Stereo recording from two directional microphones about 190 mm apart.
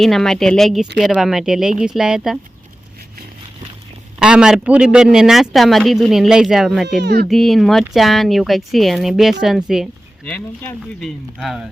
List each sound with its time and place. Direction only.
0.0 s a man's voice: centre (ahead or behind)
4.2 s a man's voice: 5° right (ahead or behind)
7.0 s speech: 60° right (ahead or behind)
7.3 s a man's voice: centre (ahead or behind)
11.3 s a man's voice: centre (ahead or behind)